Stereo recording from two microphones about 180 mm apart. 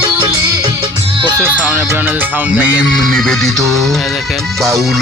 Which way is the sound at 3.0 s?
Centre (ahead or behind).